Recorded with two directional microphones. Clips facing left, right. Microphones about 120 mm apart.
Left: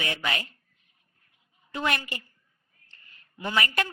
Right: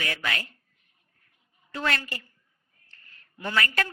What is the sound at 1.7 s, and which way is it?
A woman's voice, 20° left (ahead or behind).